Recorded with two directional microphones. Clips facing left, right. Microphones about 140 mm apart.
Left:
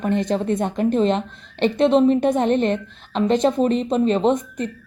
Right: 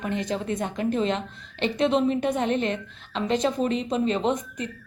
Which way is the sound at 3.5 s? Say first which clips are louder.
Left 6 dB; 50° left (ahead or behind).